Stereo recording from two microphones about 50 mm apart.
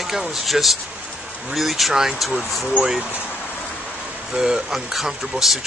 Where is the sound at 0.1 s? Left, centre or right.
Centre.